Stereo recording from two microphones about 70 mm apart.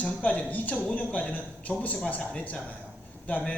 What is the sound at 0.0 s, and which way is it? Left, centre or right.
A man's voice, left.